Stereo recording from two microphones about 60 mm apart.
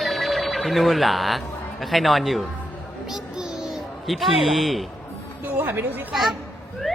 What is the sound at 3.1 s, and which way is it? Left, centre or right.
Child singing, centre.